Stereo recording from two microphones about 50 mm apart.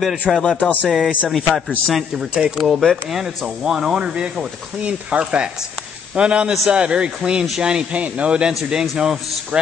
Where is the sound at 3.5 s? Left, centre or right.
Centre.